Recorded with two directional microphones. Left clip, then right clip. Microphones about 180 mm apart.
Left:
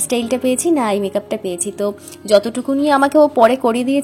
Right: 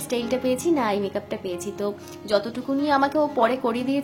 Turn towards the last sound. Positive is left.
turn(degrees=35)  # may be behind; listen again after turning